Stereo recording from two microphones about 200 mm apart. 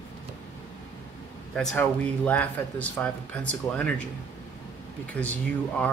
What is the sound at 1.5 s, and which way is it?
Speech, 5° left (ahead or behind).